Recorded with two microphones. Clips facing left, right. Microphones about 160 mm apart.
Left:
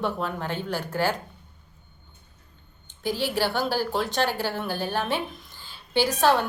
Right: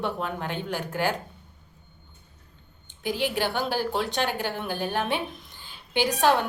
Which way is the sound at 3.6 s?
40° left (ahead or behind).